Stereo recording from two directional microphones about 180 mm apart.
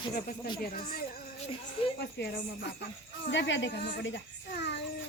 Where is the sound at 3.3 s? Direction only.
90° left; by 4.8 s 70° left (ahead or behind).